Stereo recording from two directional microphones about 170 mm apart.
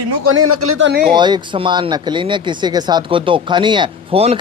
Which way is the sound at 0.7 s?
90° right.